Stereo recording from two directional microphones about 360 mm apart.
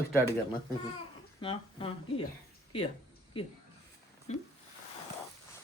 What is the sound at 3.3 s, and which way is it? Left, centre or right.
Speech, centre.